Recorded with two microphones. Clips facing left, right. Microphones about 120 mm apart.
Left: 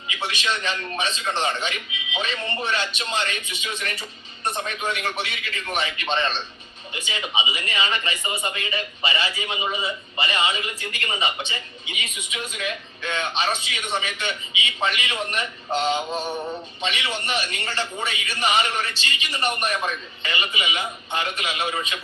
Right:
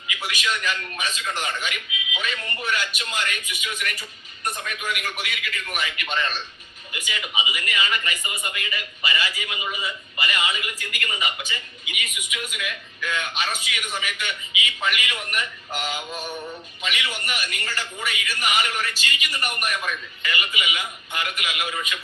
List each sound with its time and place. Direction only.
0.1 s speech: 30° left (ahead or behind)